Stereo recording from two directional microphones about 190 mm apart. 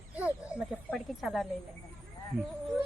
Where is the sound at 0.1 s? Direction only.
5° right (ahead or behind).